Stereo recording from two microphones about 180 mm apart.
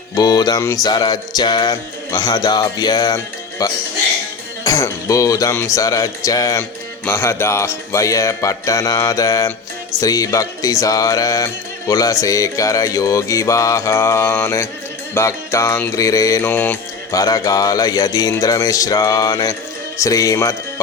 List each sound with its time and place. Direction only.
0.2 s music: 20° left (ahead or behind)
4.6 s speech: 20° left (ahead or behind)
15.1 s music: 15° left (ahead or behind)
20.0 s speech: 20° left (ahead or behind)